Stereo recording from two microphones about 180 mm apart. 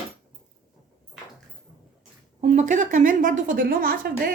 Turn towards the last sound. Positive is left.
turn(degrees=-55)  # may be behind; listen again after turning